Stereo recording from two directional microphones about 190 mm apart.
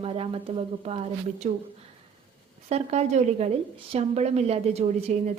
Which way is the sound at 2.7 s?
35° right (ahead or behind).